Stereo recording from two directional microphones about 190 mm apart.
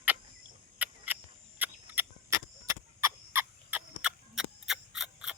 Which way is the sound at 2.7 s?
15° right (ahead or behind).